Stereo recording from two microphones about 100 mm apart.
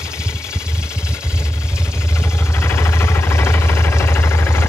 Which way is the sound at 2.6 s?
25° left (ahead or behind).